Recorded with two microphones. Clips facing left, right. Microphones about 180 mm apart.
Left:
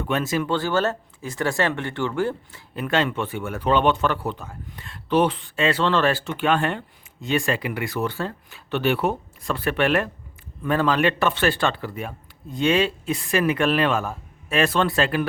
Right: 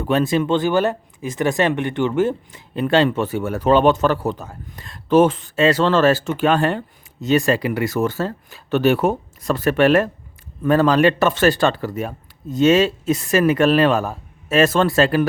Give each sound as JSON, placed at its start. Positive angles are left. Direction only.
{"t": 0.0, "sound": "speech", "side_deg": -30}